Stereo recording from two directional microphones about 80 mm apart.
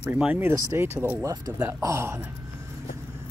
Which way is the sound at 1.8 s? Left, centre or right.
Right.